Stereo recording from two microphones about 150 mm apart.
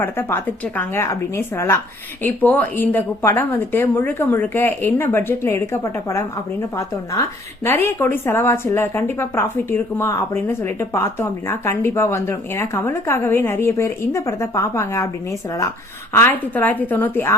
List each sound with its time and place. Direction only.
0.0 s a woman's voice: 15° left (ahead or behind)